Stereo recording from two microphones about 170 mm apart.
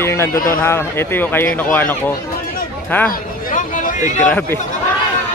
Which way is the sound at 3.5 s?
50° left (ahead or behind).